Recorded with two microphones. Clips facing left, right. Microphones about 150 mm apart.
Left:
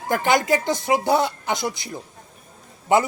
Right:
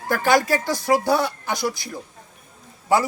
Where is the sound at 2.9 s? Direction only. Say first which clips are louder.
Left 1 dB; 20° left (ahead or behind).